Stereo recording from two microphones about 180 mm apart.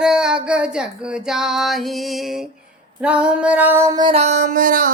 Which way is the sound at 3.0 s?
5° right (ahead or behind).